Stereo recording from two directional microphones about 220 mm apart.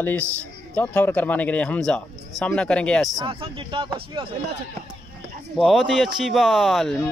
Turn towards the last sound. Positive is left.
turn(degrees=0)  # may be behind; listen again after turning